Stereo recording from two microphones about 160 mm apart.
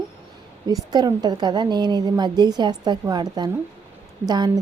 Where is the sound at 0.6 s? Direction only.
25° right (ahead or behind).